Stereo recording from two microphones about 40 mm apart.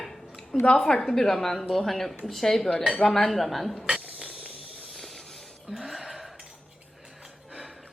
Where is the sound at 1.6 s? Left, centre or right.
Centre.